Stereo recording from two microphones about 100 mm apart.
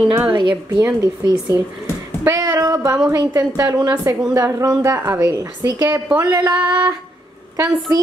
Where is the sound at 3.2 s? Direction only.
35° right (ahead or behind).